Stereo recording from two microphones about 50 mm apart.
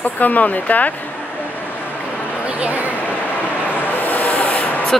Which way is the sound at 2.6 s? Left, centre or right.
Right.